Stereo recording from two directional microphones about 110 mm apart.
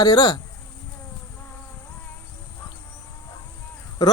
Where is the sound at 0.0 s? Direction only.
40° left (ahead or behind).